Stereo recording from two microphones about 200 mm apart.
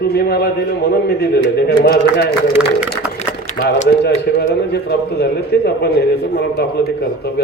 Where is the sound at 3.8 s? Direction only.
55° left (ahead or behind).